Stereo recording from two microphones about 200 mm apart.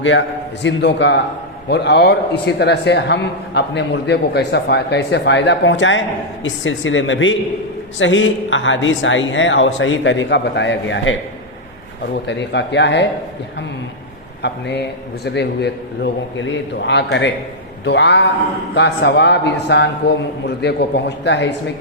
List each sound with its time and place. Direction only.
0.0 s a man's voice: 65° left (ahead or behind)
12.3 s a man's voice: 60° left (ahead or behind)
14.4 s a man's voice: 55° left (ahead or behind)